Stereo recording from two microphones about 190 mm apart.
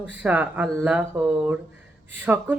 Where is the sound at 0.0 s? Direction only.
10° right (ahead or behind).